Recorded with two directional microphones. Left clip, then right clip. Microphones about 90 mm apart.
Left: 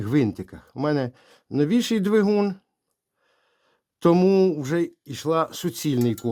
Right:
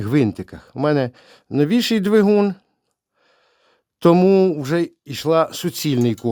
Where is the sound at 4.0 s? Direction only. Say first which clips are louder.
Right 5 dB; 25° right (ahead or behind).